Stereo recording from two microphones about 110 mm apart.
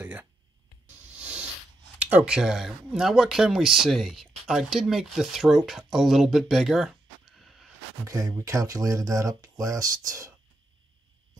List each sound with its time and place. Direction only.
0.0 s music: 15° right (ahead or behind)
1.1 s a sound: 10° right (ahead or behind)
2.0 s speech: 15° right (ahead or behind)
8.1 s speech: 30° right (ahead or behind)